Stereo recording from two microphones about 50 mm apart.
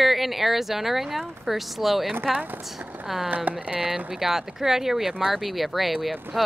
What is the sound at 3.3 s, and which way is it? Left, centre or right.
Speech, right.